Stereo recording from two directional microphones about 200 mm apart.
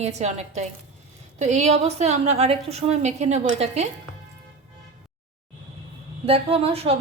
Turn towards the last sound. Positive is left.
turn(degrees=-30)  # may be behind; listen again after turning